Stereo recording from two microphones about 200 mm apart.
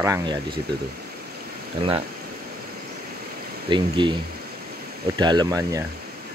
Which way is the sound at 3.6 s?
25° right (ahead or behind).